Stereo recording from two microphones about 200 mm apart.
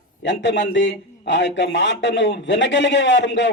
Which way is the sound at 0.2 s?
65° left (ahead or behind).